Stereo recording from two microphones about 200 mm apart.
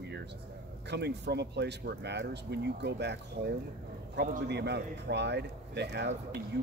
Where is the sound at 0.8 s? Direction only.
60° right (ahead or behind).